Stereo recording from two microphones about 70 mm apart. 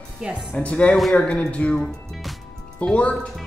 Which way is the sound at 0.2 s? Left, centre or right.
Centre.